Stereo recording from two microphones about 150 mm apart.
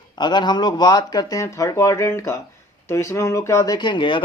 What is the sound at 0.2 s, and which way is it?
Speech, 30° left (ahead or behind).